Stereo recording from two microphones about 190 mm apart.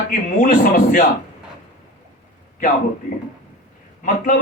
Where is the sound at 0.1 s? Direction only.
45° left (ahead or behind).